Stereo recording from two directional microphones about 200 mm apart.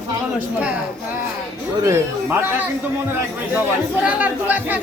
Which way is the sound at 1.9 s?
10° right (ahead or behind).